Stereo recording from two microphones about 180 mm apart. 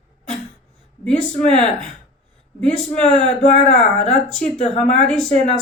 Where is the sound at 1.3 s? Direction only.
40° left (ahead or behind).